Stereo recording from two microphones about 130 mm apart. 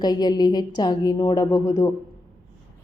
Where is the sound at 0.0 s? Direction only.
30° left (ahead or behind).